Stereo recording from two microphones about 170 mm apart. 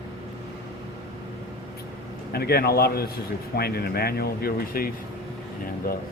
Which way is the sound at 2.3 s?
70° left (ahead or behind).